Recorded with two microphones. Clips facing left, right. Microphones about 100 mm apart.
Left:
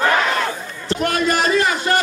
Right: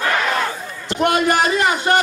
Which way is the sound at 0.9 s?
20° right (ahead or behind).